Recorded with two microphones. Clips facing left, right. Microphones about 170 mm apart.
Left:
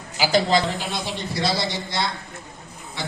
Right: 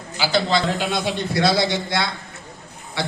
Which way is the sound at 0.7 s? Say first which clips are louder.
Right 5 dB; 70° right (ahead or behind).